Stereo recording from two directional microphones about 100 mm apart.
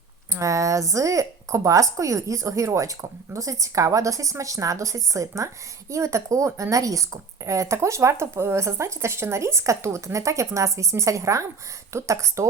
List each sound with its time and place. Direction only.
0.3 s speech: 30° right (ahead or behind)